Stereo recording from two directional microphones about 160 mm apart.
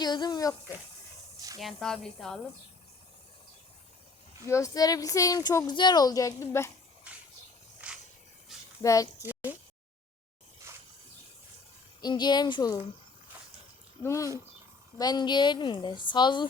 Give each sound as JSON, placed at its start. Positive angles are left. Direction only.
{"t": 0.0, "sound": "speech", "side_deg": 25}
{"t": 1.5, "sound": "speech", "side_deg": 0}
{"t": 4.4, "sound": "speech", "side_deg": 20}
{"t": 7.8, "sound": "a sound", "side_deg": -10}
{"t": 8.8, "sound": "speech", "side_deg": 20}
{"t": 9.2, "sound": "a sound", "side_deg": -10}
{"t": 10.7, "sound": "a sound", "side_deg": -15}
{"t": 12.0, "sound": "speech", "side_deg": 25}
{"t": 14.0, "sound": "speech", "side_deg": 20}